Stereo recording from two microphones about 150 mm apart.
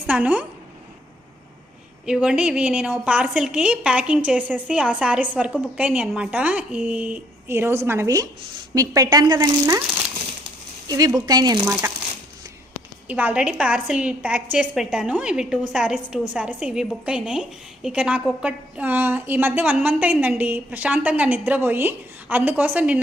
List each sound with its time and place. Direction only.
0.1 s a woman's voice: 10° right (ahead or behind)
2.0 s a woman's voice: 5° right (ahead or behind); by 9.8 s 20° right (ahead or behind)
10.8 s a woman's voice: 25° right (ahead or behind)
13.1 s a woman's voice: 10° right (ahead or behind)